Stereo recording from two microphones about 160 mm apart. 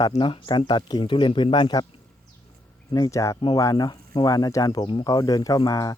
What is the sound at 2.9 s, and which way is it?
Speech, 20° left (ahead or behind).